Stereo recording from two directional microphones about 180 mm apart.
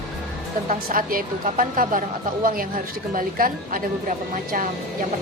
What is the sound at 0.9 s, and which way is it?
A woman's voice, 50° right (ahead or behind).